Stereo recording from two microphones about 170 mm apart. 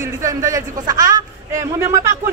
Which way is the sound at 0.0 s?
20° right (ahead or behind).